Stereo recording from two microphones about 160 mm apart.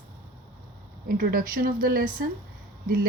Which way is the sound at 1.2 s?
65° right (ahead or behind).